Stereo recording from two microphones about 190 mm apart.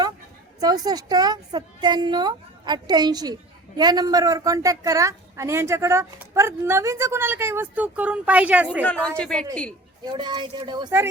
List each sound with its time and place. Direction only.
0.6 s a woman's voice: 20° right (ahead or behind)
8.8 s a woman's voice: 5° left (ahead or behind)
10.0 s a woman's voice: 25° right (ahead or behind)